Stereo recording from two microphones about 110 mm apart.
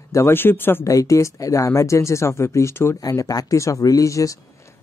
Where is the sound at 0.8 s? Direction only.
30° left (ahead or behind).